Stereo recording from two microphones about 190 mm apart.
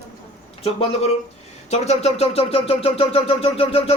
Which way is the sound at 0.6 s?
30° left (ahead or behind).